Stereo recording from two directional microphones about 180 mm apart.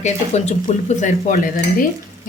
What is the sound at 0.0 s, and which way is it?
Speech, 40° left (ahead or behind).